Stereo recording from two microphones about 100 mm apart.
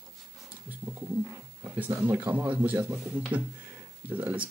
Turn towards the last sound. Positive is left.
turn(degrees=-15)  # may be behind; listen again after turning